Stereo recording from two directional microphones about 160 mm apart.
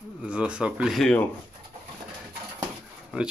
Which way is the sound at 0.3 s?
5° right (ahead or behind).